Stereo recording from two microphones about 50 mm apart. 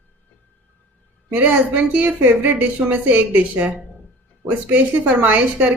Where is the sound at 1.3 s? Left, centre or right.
Right.